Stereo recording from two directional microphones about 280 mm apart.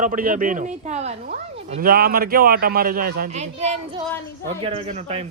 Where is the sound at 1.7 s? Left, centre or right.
Right.